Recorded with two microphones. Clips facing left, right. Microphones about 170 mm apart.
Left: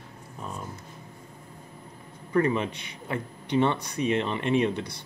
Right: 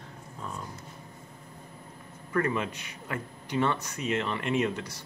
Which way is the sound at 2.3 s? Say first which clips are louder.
Left 4 dB; 25° left (ahead or behind).